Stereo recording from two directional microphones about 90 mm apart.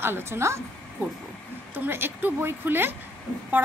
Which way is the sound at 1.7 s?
25° right (ahead or behind).